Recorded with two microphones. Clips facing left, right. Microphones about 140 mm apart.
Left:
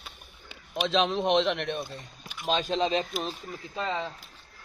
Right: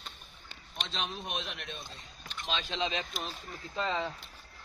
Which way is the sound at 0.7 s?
90° left.